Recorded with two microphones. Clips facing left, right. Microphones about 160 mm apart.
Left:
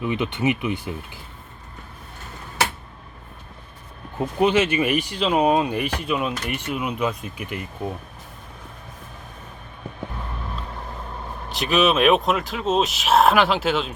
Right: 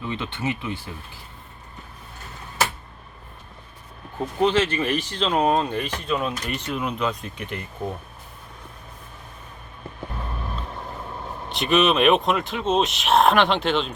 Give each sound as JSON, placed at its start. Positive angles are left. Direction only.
{"t": 0.0, "sound": "speech", "side_deg": 15}
{"t": 4.4, "sound": "speech", "side_deg": 10}
{"t": 11.4, "sound": "speech", "side_deg": 0}